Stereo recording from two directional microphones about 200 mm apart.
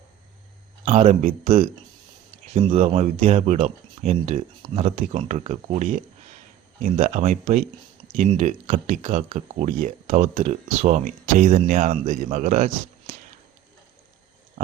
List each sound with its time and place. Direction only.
0.9 s speech: 30° right (ahead or behind)